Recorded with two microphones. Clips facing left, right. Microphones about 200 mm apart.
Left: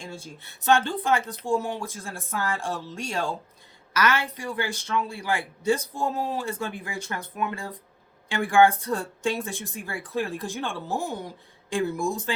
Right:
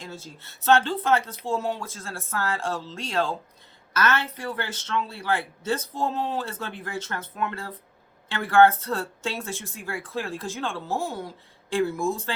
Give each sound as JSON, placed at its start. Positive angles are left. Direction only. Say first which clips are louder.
{"t": 0.0, "sound": "speech", "louder": "left 1 dB", "side_deg": 15}